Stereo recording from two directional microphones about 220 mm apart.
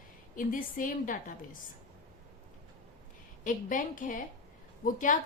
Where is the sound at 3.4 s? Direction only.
35° left (ahead or behind).